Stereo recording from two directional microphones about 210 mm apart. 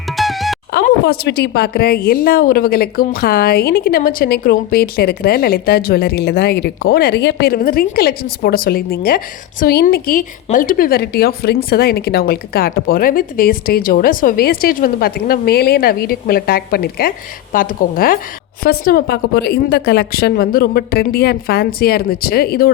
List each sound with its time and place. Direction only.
0.2 s music: centre (ahead or behind)
0.7 s a woman's voice: 50° left (ahead or behind)